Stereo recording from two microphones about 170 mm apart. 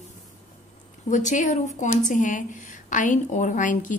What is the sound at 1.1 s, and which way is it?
A woman's voice, 45° left (ahead or behind).